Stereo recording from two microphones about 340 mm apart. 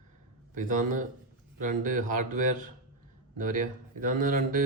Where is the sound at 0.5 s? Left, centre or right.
Right.